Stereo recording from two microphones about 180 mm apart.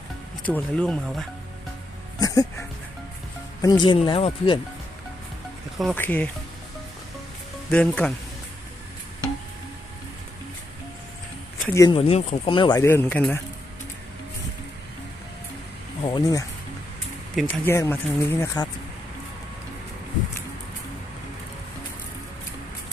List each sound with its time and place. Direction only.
0.4 s speech: 5° left (ahead or behind)
2.1 s music: 20° left (ahead or behind)
3.6 s speech: 25° left (ahead or behind)
5.8 s speech: 10° left (ahead or behind)
7.7 s speech: 5° left (ahead or behind)
11.7 s speech: 20° left (ahead or behind)
11.9 s speech: 35° left (ahead or behind)
12.8 s speech: 10° left (ahead or behind)
16.0 s speech: 20° left (ahead or behind)